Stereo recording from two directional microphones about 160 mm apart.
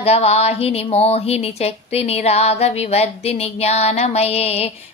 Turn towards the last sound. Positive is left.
turn(degrees=40)  # may be behind; listen again after turning